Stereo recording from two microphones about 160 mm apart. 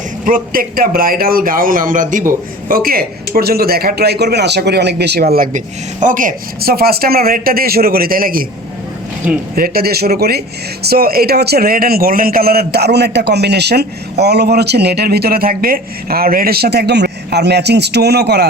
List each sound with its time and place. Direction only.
0.3 s a man's voice: 60° right (ahead or behind)
2.6 s a man's voice: 65° right (ahead or behind)
5.5 s a man's voice: 55° right (ahead or behind)
9.2 s speech: 10° right (ahead or behind)
9.6 s a man's voice: 70° right (ahead or behind); by 18.4 s 90° right